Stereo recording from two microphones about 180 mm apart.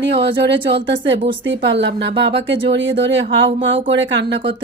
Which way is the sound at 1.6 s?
75° right (ahead or behind).